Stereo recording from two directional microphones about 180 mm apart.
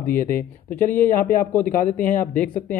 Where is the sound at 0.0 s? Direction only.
10° left (ahead or behind).